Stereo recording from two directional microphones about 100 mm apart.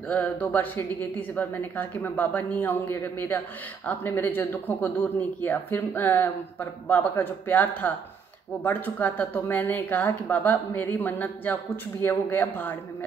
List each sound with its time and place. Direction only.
0.1 s speech: 15° left (ahead or behind)